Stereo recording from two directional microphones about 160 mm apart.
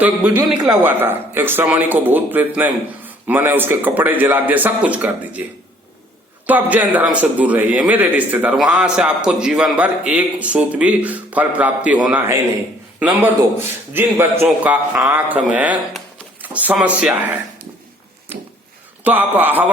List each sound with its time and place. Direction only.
0.0 s a man's voice: 10° right (ahead or behind)
0.5 s a man's voice: 25° right (ahead or behind)
0.9 s a man's voice: 15° right (ahead or behind)
6.4 s a man's voice: 10° right (ahead or behind)
13.9 s a man's voice: 15° right (ahead or behind)
19.0 s a man's voice: 10° right (ahead or behind)